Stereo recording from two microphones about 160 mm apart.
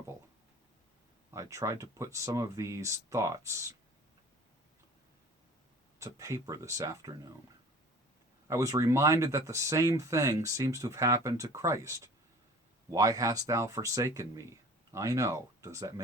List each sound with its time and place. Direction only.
1.3 s speech: 20° right (ahead or behind)
6.0 s speech: 20° right (ahead or behind)
8.4 s speech: 20° right (ahead or behind)